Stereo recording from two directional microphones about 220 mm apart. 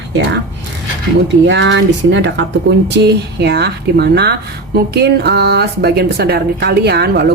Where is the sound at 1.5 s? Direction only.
55° right (ahead or behind).